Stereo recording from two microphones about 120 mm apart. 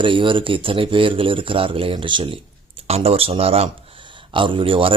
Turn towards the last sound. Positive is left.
turn(degrees=-50)  # may be behind; listen again after turning